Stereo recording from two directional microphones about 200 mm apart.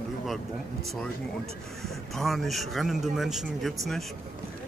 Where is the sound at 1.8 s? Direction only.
Centre (ahead or behind).